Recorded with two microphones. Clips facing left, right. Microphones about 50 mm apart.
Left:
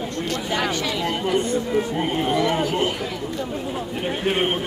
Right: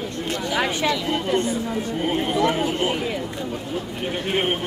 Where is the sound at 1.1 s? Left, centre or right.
Centre.